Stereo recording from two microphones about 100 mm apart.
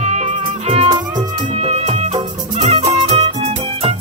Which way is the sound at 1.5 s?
90° right.